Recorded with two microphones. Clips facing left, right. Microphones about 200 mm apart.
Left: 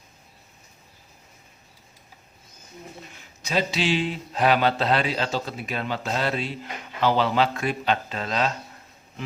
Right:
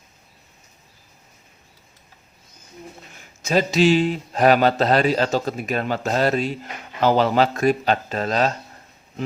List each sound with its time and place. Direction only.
3.4 s a man's voice: 45° right (ahead or behind)